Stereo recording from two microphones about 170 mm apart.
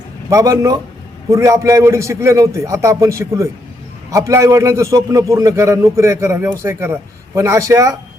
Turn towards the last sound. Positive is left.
turn(degrees=-20)  # may be behind; listen again after turning